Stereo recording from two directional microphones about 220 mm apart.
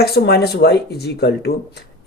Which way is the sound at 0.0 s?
45° left (ahead or behind).